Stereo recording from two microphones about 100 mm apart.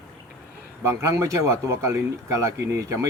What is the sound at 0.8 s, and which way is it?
A man's voice, 30° right (ahead or behind).